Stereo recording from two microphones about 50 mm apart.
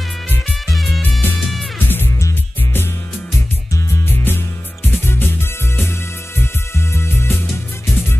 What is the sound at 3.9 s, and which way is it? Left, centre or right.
Music, left.